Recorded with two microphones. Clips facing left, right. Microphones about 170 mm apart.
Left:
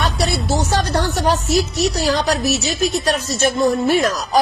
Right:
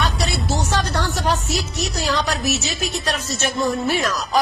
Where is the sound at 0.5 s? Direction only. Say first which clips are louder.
Left 3 dB; 35° left (ahead or behind).